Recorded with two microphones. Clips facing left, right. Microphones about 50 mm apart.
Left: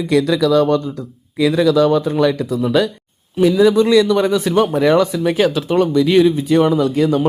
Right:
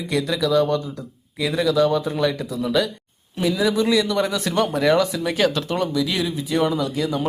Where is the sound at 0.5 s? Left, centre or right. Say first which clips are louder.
Left 4 dB; left.